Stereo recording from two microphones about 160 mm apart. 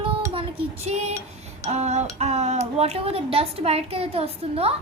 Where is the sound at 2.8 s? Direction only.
40° right (ahead or behind).